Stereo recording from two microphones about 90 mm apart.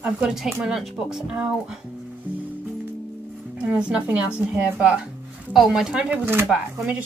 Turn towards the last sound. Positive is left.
turn(degrees=-15)  # may be behind; listen again after turning